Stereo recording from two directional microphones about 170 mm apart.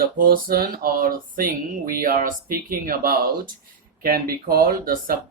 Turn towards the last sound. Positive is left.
turn(degrees=-55)  # may be behind; listen again after turning